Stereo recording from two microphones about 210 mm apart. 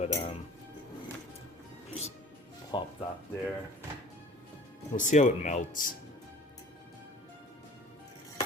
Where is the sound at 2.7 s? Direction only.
20° left (ahead or behind).